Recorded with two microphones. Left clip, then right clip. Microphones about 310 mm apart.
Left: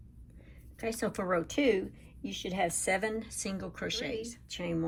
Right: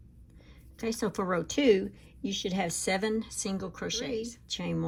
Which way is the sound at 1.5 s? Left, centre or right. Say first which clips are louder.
Right 4 dB; centre.